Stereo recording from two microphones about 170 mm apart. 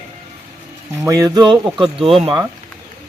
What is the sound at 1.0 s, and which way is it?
Speech, 20° right (ahead or behind).